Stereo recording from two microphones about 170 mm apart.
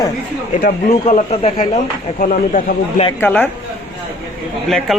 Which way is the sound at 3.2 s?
10° left (ahead or behind).